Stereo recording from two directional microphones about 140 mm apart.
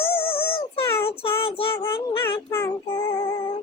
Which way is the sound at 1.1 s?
40° left (ahead or behind).